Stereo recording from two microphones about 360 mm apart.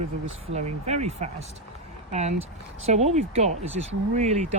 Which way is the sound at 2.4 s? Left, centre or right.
Centre.